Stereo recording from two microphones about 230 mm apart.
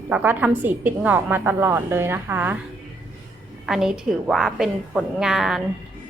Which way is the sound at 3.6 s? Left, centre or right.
Centre.